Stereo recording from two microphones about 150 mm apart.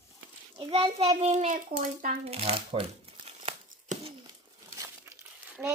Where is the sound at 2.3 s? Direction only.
40° right (ahead or behind).